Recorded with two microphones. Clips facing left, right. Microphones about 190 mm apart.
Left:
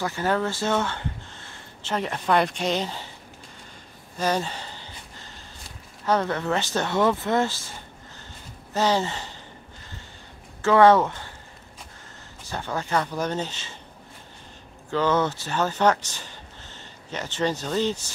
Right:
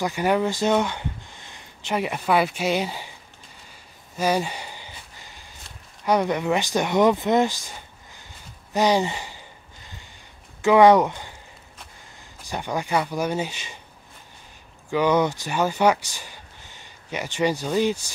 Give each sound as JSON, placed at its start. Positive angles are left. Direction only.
{"t": 0.0, "sound": "speech", "side_deg": -15}
{"t": 4.2, "sound": "a sound", "side_deg": -10}
{"t": 6.0, "sound": "speech", "side_deg": -15}
{"t": 8.7, "sound": "speech", "side_deg": -15}
{"t": 10.6, "sound": "speech", "side_deg": -15}
{"t": 12.4, "sound": "speech", "side_deg": -15}
{"t": 14.9, "sound": "speech", "side_deg": -15}